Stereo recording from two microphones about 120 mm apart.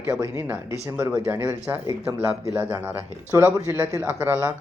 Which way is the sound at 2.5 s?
15° right (ahead or behind).